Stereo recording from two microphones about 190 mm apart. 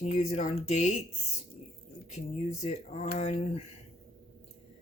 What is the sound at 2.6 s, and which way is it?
A woman's voice, 35° left (ahead or behind).